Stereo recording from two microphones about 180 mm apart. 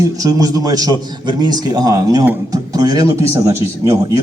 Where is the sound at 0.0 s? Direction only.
20° right (ahead or behind).